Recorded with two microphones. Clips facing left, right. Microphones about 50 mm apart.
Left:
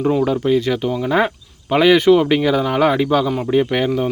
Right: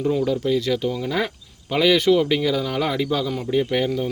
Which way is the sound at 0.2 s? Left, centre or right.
Left.